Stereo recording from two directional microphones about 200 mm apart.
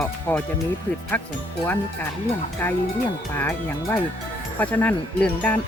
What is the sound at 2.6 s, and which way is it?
Speech, 10° left (ahead or behind).